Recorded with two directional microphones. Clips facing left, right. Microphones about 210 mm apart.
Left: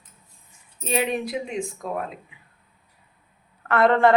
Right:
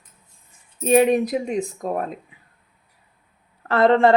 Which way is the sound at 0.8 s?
45° right (ahead or behind).